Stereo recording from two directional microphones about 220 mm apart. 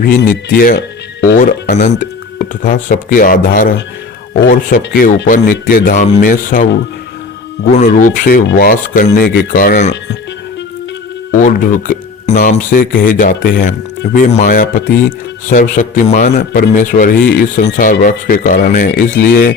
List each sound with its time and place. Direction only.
0.1 s speech: 45° left (ahead or behind)
7.7 s speech: 35° left (ahead or behind)
11.3 s speech: 35° left (ahead or behind)